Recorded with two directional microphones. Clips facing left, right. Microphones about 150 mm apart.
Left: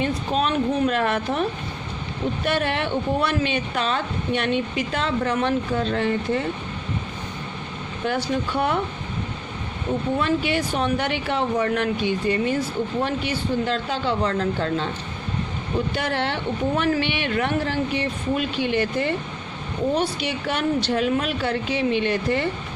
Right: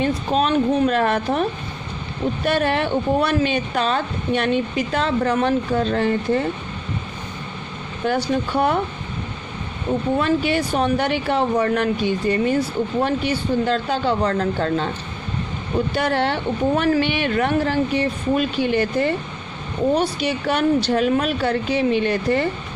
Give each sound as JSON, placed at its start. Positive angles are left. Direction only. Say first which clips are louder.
{"t": 0.0, "sound": "speech", "louder": "right 3 dB", "side_deg": -35}
{"t": 8.0, "sound": "speech", "louder": "right 3 dB", "side_deg": -40}
{"t": 10.2, "sound": "speech", "louder": "right 3 dB", "side_deg": -40}
{"t": 16.0, "sound": "speech", "louder": "right 4 dB", "side_deg": -40}